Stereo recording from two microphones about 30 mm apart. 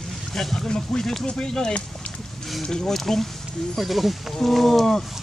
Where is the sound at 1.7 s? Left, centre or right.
Left.